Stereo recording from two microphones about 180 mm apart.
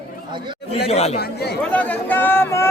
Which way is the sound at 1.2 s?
60° left (ahead or behind).